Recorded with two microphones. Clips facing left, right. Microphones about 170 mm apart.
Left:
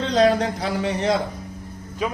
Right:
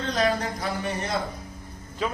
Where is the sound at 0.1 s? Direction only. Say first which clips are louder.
Left 7 dB; 75° left (ahead or behind).